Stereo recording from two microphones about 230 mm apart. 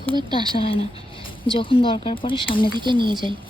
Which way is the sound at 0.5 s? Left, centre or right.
Left.